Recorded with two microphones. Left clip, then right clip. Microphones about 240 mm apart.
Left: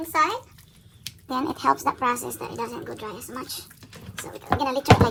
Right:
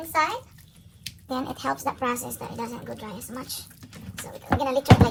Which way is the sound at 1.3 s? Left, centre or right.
Left.